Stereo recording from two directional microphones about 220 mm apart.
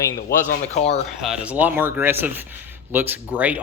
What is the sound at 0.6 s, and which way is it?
Speech, 30° left (ahead or behind).